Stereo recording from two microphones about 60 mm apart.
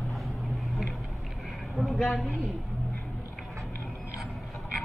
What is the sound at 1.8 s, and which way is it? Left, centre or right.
Speech, centre.